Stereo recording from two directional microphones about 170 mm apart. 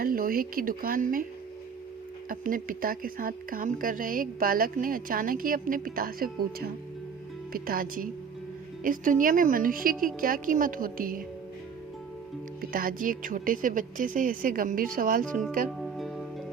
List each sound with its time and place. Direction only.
0.0 s speech: 60° right (ahead or behind)
2.3 s a woman's voice: 55° right (ahead or behind)
12.7 s a woman's voice: 55° right (ahead or behind)
15.8 s music: centre (ahead or behind)